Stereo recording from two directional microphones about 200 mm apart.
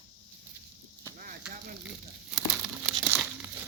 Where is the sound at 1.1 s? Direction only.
45° right (ahead or behind).